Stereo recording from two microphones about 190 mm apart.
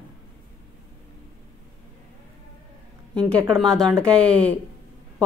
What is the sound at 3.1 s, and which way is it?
A woman's voice, 5° left (ahead or behind).